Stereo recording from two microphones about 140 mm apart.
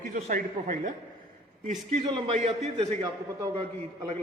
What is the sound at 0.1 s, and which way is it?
A man's voice, 65° right (ahead or behind).